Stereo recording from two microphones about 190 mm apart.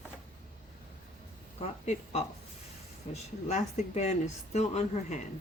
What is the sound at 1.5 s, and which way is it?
Speech, 35° left (ahead or behind).